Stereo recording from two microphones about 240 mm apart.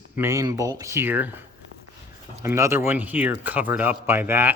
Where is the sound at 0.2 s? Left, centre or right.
Centre.